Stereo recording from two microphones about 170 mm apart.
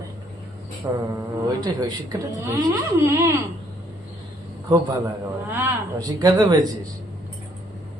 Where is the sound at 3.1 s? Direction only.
15° right (ahead or behind).